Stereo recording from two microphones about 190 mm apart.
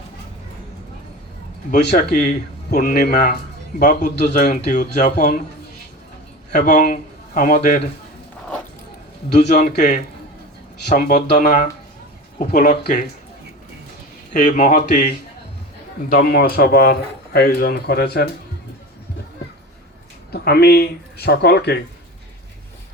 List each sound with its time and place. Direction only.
1.8 s speech: 55° left (ahead or behind)
6.5 s a man's voice: 45° left (ahead or behind)
9.4 s speech: 60° left (ahead or behind)
9.7 s speech: 40° left (ahead or behind)
14.3 s speech: 40° left (ahead or behind); by 18.3 s 55° left (ahead or behind)
20.3 s speech: 55° left (ahead or behind)